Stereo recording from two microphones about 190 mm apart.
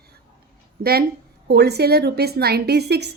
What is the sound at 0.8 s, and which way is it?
A woman's voice, 55° right (ahead or behind).